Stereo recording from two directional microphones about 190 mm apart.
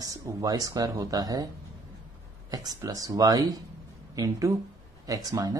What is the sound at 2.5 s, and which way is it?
Speech, 20° right (ahead or behind).